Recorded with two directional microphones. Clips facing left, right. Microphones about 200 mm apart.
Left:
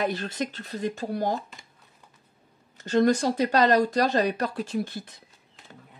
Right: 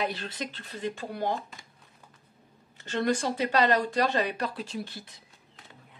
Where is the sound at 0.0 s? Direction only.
45° left (ahead or behind).